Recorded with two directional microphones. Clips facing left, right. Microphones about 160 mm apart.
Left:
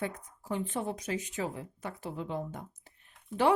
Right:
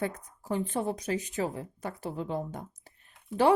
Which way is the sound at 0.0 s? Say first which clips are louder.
Right 3 dB; 35° right (ahead or behind).